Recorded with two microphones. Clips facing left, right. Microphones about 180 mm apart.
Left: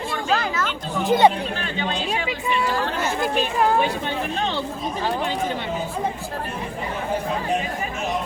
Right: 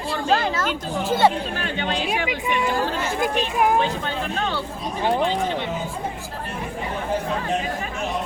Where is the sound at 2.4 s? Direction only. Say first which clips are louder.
Even; 20° right (ahead or behind).